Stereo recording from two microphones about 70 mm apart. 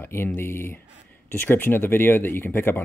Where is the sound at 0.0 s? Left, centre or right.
Left.